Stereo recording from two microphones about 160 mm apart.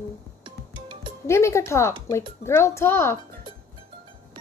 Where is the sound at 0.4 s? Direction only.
30° right (ahead or behind).